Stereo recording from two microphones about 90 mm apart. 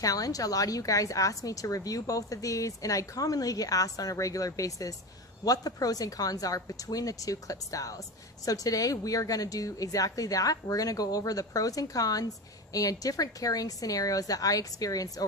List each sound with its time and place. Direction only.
0.0 s a woman's voice: 40° left (ahead or behind)